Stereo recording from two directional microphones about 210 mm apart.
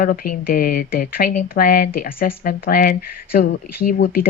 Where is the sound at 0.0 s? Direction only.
45° left (ahead or behind).